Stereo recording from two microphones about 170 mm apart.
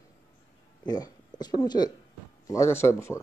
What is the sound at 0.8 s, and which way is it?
Speech, 25° left (ahead or behind).